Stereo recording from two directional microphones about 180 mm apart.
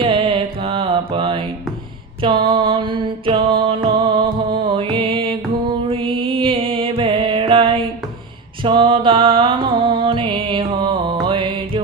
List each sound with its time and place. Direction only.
0.0 s mantra: 30° right (ahead or behind)
2.2 s music: 25° right (ahead or behind)